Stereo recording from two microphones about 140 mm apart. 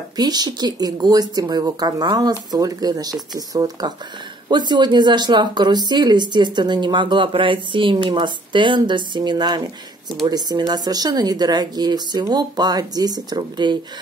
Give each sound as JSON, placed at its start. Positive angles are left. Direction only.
{"t": 0.2, "sound": "speech", "side_deg": -30}